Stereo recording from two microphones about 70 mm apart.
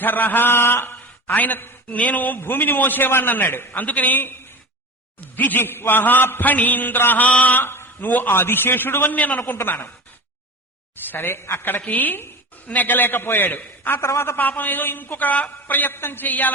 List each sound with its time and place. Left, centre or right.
0.0 s a man's voice: left
5.4 s a man's voice: left
9.4 s a woman's voice: left
11.1 s a woman's voice: left
14.3 s a man's voice: left